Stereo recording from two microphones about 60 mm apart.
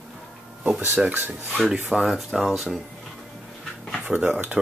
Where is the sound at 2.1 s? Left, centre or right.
Centre.